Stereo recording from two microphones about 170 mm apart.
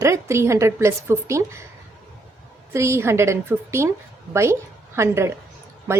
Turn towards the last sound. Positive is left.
turn(degrees=-15)  # may be behind; listen again after turning